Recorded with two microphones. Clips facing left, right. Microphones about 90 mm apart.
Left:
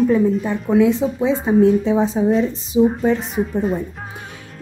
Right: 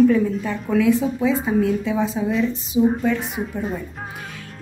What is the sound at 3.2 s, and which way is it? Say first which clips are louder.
Speech: left 6 dB; centre (ahead or behind).